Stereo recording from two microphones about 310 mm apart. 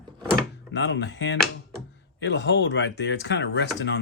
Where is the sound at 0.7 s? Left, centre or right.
Left.